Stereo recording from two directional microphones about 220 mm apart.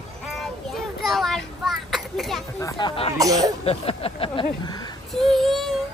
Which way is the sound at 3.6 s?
25° left (ahead or behind).